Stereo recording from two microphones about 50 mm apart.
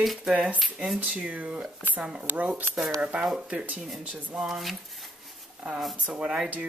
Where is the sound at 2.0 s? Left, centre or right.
Centre.